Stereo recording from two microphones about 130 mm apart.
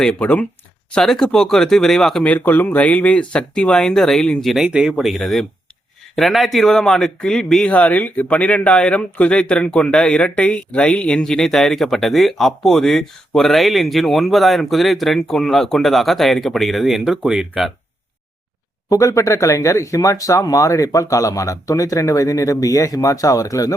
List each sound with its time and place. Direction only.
0.0 s speech: 10° left (ahead or behind)
18.9 s speech: 25° left (ahead or behind)